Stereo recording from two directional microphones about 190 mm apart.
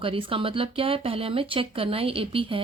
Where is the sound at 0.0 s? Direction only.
30° right (ahead or behind).